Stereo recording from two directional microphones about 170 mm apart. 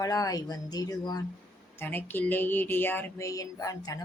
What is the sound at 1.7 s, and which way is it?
Speech, 10° left (ahead or behind).